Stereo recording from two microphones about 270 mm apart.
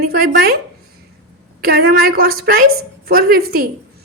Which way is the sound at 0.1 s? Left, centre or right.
Right.